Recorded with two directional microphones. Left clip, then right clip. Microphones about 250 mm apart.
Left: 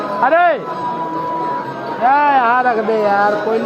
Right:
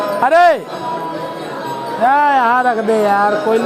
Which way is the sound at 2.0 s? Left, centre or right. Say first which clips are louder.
Even; right.